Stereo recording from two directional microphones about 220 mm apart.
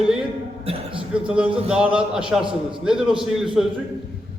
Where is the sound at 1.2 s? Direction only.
5° right (ahead or behind).